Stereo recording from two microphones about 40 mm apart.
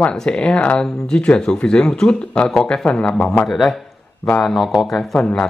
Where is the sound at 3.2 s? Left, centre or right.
Left.